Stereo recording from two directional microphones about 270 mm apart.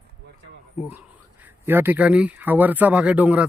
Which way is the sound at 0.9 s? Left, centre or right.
Centre.